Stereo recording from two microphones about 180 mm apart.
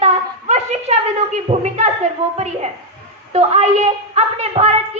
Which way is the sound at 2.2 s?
40° right (ahead or behind).